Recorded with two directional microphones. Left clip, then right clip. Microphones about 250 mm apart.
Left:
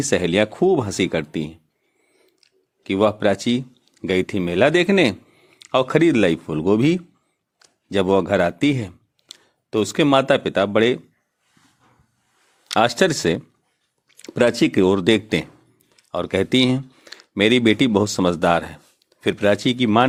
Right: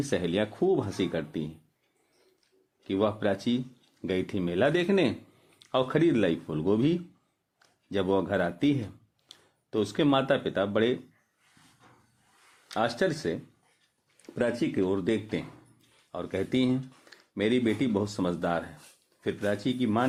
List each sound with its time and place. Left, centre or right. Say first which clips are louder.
0.0 s speech: left 10 dB; left
2.4 s a sound: left 13 dB; left
4.0 s speech: left 9 dB; left
12.6 s speech: left 11 dB; left